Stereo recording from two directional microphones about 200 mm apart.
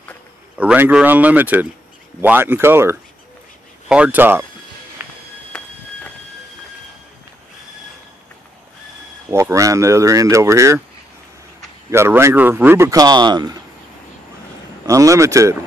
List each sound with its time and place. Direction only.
0.6 s speech: 5° right (ahead or behind)
5.0 s a sound: 10° right (ahead or behind)
9.3 s speech: 15° right (ahead or behind)
11.9 s speech: 15° right (ahead or behind)
14.9 s speech: 15° right (ahead or behind)